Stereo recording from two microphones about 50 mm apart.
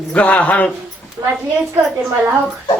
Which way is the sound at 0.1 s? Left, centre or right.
Left.